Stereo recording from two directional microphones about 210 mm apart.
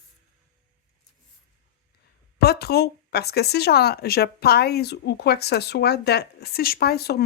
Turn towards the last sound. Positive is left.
turn(degrees=50)  # may be behind; listen again after turning